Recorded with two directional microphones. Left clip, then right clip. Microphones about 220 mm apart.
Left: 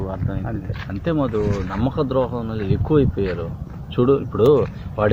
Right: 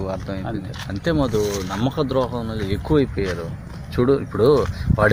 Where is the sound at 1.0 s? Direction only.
25° right (ahead or behind).